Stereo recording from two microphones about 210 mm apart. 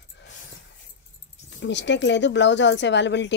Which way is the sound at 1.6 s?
55° left (ahead or behind).